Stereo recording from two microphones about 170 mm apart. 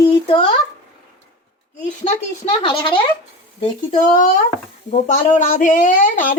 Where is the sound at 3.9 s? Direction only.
50° left (ahead or behind).